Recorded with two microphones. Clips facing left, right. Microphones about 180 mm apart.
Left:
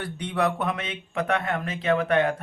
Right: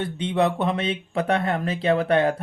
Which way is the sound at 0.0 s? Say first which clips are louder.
Right 4 dB; 25° right (ahead or behind).